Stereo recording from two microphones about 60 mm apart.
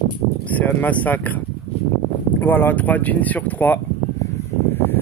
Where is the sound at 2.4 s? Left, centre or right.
Left.